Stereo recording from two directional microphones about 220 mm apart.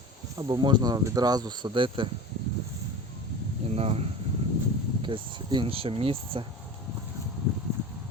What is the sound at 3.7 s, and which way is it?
Speech, 25° right (ahead or behind).